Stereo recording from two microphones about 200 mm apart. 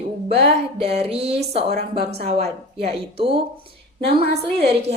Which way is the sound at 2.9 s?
30° right (ahead or behind).